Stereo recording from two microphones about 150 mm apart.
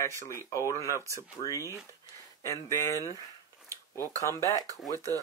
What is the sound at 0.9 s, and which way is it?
Speech, 20° right (ahead or behind).